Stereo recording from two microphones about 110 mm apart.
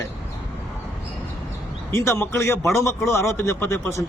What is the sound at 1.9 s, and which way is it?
Speech, 25° left (ahead or behind).